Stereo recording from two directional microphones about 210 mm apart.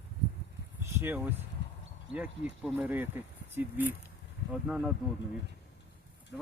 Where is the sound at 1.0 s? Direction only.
10° right (ahead or behind).